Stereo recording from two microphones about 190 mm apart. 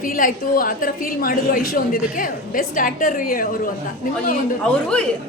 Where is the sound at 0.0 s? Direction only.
45° left (ahead or behind).